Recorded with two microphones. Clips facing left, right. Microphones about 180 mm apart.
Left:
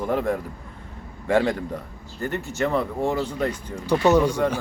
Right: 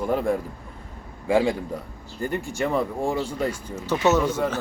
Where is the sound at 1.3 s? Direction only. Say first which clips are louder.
Even; 10° right (ahead or behind).